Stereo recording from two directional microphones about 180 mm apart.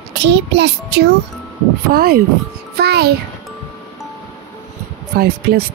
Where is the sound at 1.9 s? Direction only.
55° right (ahead or behind).